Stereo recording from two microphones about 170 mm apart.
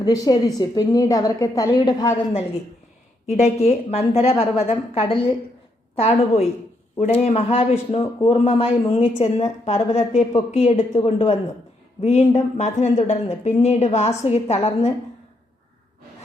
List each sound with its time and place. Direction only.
0.0 s a woman's voice: 20° left (ahead or behind)
3.2 s a man's voice: 40° left (ahead or behind)